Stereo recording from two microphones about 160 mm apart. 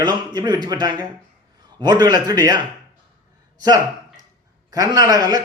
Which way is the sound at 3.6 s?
25° right (ahead or behind).